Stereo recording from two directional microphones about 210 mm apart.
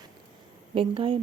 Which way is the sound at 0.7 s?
25° right (ahead or behind).